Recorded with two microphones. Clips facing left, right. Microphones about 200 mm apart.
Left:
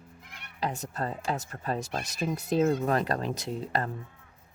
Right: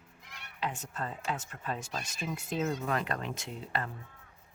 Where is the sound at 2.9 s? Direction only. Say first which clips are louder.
Left 6 dB; 35° left (ahead or behind).